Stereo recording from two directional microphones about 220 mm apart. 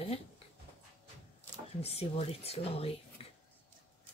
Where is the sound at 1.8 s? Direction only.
25° left (ahead or behind).